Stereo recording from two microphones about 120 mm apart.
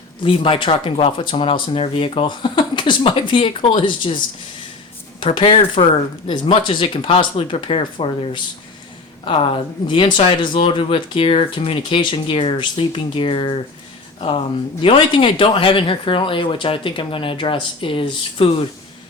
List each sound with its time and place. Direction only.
0.2 s speech: 50° left (ahead or behind)
5.2 s speech: 50° left (ahead or behind)